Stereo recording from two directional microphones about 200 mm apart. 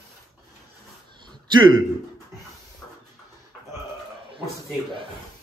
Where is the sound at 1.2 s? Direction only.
20° right (ahead or behind).